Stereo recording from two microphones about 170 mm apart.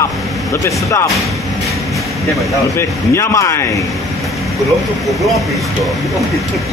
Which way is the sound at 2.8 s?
15° left (ahead or behind).